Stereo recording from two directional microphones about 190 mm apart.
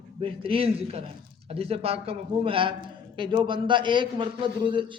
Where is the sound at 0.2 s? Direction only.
30° right (ahead or behind).